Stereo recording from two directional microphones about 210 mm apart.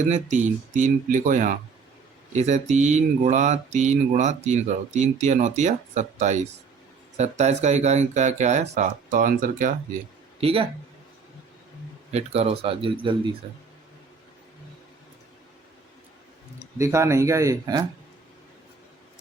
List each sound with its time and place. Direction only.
0.1 s speech: 35° right (ahead or behind)
10.4 s speech: 25° right (ahead or behind)
12.1 s speech: 30° right (ahead or behind)
16.7 s speech: 15° right (ahead or behind)